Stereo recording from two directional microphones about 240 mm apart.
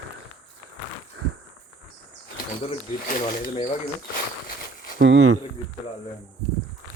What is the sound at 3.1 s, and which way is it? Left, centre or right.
Speech, left.